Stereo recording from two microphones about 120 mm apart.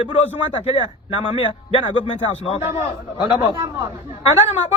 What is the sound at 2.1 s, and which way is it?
Speech, 50° left (ahead or behind).